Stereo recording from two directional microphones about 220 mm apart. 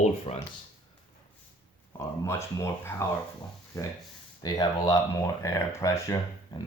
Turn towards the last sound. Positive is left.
turn(degrees=15)  # may be behind; listen again after turning